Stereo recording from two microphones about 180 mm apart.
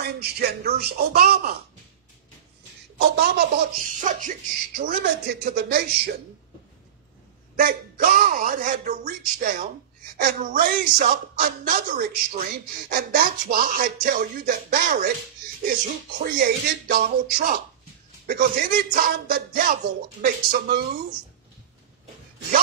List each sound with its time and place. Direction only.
0.0 s speech: 60° right (ahead or behind)
3.7 s speech: 45° right (ahead or behind)
7.5 s speech: 50° right (ahead or behind)